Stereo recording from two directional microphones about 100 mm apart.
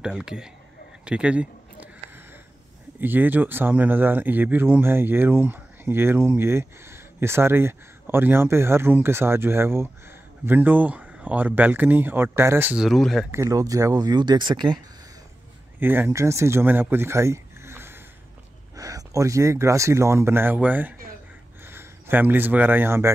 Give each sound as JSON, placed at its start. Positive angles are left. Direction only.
{"t": 0.0, "sound": "speech", "side_deg": -5}
{"t": 1.0, "sound": "a sound", "side_deg": -10}
{"t": 3.0, "sound": "speech", "side_deg": -20}
{"t": 12.7, "sound": "speech", "side_deg": 0}
{"t": 13.3, "sound": "speech", "side_deg": -30}
{"t": 15.8, "sound": "speech", "side_deg": -20}
{"t": 16.9, "sound": "a sound", "side_deg": -25}
{"t": 18.8, "sound": "speech", "side_deg": -35}